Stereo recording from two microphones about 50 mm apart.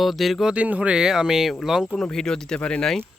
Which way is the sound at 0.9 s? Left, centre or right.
Centre.